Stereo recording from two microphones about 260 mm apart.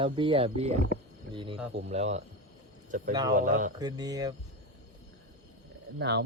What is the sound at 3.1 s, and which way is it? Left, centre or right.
Speech, centre.